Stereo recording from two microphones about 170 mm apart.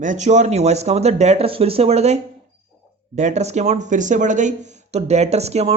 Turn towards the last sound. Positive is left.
turn(degrees=-40)  # may be behind; listen again after turning